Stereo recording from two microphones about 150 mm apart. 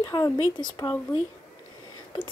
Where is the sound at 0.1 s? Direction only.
25° left (ahead or behind).